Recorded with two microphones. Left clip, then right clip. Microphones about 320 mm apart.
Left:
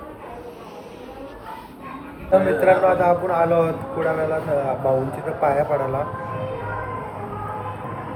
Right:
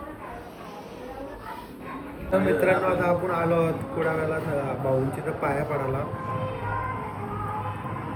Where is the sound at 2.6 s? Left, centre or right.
Centre.